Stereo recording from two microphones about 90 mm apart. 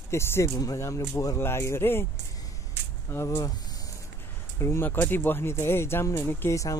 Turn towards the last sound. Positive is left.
turn(degrees=30)  # may be behind; listen again after turning